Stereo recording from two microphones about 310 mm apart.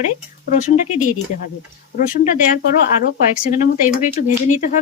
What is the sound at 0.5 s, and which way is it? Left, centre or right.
Speech, left.